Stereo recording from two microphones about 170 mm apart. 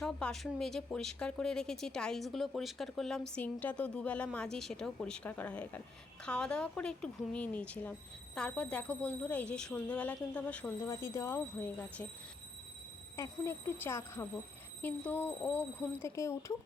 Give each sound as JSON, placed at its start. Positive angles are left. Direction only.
{"t": 0.0, "sound": "a woman's voice", "side_deg": 5}
{"t": 13.1, "sound": "a woman's voice", "side_deg": 15}